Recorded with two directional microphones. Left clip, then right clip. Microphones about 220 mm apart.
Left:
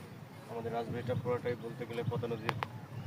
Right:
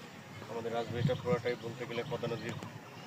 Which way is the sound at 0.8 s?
50° left (ahead or behind).